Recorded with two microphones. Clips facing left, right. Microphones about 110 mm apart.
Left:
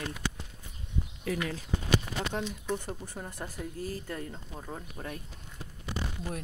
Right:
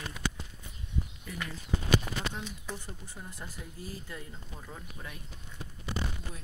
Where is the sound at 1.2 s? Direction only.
90° left.